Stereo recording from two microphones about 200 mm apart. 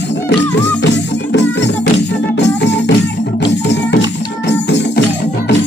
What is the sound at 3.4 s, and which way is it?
Music, 60° left (ahead or behind).